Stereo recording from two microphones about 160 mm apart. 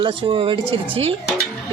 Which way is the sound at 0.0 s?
30° right (ahead or behind).